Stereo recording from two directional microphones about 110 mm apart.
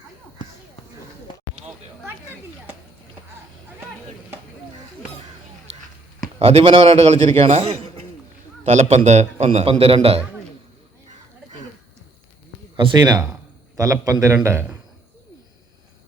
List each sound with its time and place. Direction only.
6.4 s a man's voice: 60° right (ahead or behind)
8.6 s a man's voice: 80° right; by 10.2 s 60° right (ahead or behind)
12.7 s a man's voice: 35° right (ahead or behind); by 14.8 s 20° right (ahead or behind)